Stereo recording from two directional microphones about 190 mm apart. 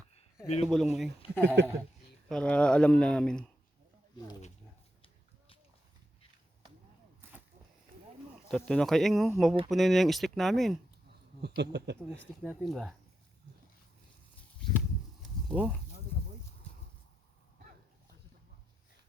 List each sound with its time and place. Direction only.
0.4 s speech: 35° left (ahead or behind)
0.7 s speech: centre (ahead or behind)
1.6 s speech: 65° right (ahead or behind)
2.3 s speech: 5° left (ahead or behind)
8.4 s speech: centre (ahead or behind)
11.4 s speech: 60° right (ahead or behind)
12.5 s speech: centre (ahead or behind)
15.4 s speech: 5° right (ahead or behind)